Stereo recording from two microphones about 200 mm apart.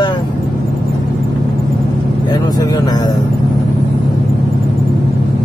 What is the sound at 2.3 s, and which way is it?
Vehicle, 20° left (ahead or behind).